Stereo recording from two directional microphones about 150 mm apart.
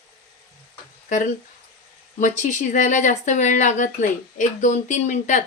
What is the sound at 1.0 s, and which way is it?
Speech, 60° left (ahead or behind).